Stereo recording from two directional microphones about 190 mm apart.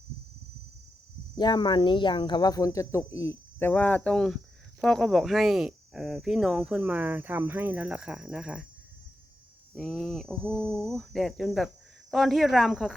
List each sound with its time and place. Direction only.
1.4 s speech: 25° left (ahead or behind); by 8.6 s 5° right (ahead or behind)
9.7 s speech: centre (ahead or behind)